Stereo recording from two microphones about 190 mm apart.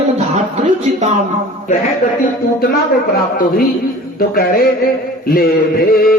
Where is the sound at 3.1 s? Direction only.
50° left (ahead or behind).